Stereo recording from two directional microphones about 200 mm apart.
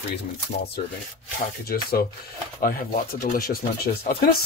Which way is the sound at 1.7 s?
50° left (ahead or behind).